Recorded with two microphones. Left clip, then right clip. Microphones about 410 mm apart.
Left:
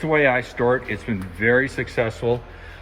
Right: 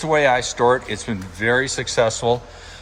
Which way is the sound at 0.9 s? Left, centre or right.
Right.